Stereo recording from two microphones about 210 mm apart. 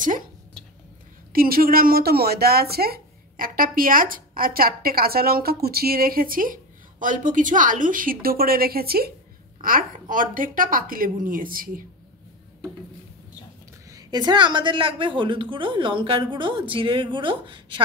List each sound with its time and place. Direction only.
1.3 s a woman's voice: 45° right (ahead or behind)
13.8 s a woman's voice: 20° right (ahead or behind)